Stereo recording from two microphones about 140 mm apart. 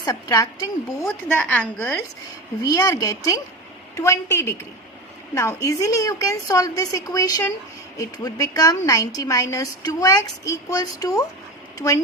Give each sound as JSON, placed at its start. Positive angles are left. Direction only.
{"t": 0.0, "sound": "speech", "side_deg": 25}
{"t": 2.6, "sound": "speech", "side_deg": 25}